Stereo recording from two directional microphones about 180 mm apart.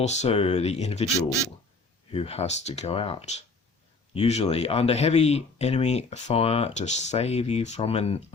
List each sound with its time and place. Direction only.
0.0 s speech: 40° left (ahead or behind)
2.1 s speech: 35° left (ahead or behind)